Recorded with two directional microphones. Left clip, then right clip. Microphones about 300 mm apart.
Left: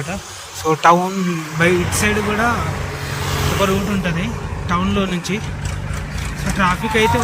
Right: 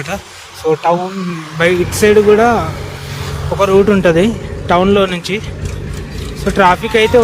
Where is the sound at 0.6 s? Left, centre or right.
Centre.